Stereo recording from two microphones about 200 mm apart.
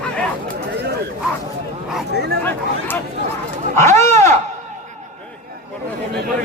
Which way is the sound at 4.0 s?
15° left (ahead or behind).